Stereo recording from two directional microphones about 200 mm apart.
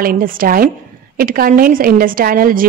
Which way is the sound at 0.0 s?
45° right (ahead or behind).